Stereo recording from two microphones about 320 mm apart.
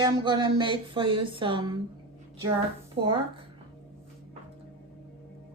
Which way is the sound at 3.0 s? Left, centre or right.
Centre.